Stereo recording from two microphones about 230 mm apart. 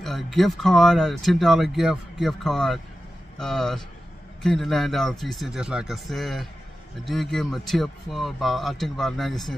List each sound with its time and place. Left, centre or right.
0.0 s speech: centre